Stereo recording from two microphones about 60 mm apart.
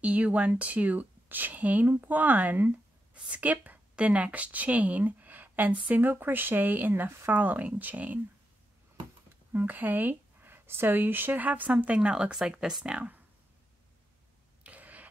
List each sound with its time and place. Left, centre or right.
0.0 s a woman's voice: right
9.5 s speech: right; by 13.1 s centre
14.6 s a sound: right